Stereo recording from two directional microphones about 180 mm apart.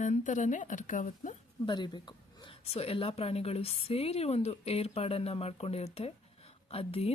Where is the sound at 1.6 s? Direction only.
25° left (ahead or behind).